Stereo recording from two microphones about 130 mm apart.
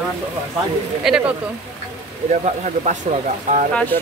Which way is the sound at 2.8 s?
65° right (ahead or behind).